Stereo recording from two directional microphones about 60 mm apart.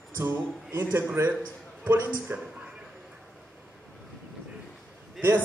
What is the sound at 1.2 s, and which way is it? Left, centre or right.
Speech, right.